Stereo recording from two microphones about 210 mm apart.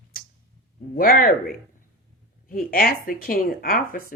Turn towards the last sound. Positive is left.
turn(degrees=45)  # may be behind; listen again after turning